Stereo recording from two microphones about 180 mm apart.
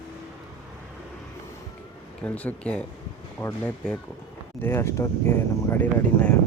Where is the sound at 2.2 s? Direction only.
10° left (ahead or behind).